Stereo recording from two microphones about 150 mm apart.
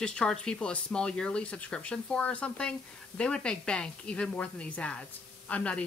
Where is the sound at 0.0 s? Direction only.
5° left (ahead or behind).